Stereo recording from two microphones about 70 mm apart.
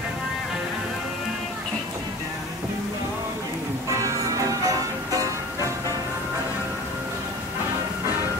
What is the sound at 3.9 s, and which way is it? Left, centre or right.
Music, right.